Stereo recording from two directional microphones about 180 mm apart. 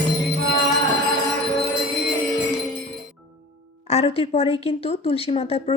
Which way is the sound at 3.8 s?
35° left (ahead or behind).